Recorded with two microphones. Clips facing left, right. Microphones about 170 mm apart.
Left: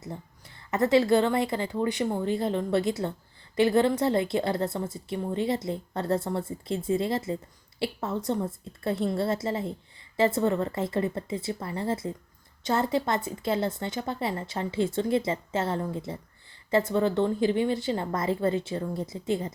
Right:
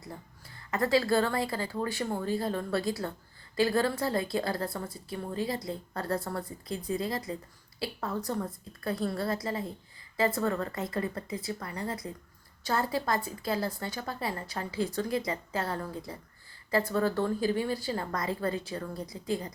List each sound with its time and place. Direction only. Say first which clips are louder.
0.0 s a woman's voice: left 5 dB; 20° left (ahead or behind)